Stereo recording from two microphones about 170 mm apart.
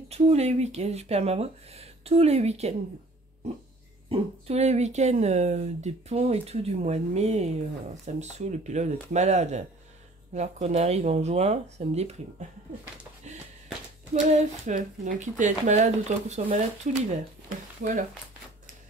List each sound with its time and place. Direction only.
0.1 s speech: 40° right (ahead or behind)
4.1 s speech: 40° right (ahead or behind)
13.2 s a sound: 45° right (ahead or behind)
14.3 s speech: 50° right (ahead or behind)